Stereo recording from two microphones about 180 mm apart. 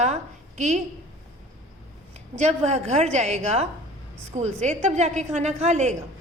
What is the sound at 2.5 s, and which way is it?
A woman's voice, 40° right (ahead or behind).